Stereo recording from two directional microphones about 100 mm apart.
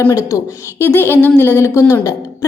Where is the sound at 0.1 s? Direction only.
30° left (ahead or behind).